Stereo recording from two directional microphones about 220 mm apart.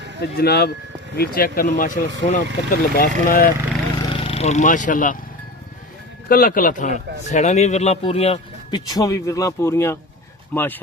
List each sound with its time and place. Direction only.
0.4 s speech: 45° left (ahead or behind)
4.1 s speech: 25° left (ahead or behind)
6.2 s a man's voice: 40° left (ahead or behind); by 10.8 s 10° left (ahead or behind)